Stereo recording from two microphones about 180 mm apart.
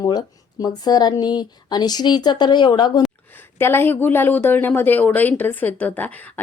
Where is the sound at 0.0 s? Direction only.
20° left (ahead or behind).